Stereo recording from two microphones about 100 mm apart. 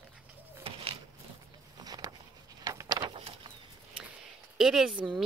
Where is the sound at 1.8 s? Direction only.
40° right (ahead or behind).